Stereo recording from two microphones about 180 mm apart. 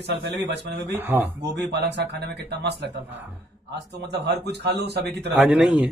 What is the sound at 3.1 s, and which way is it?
Speech, 10° right (ahead or behind).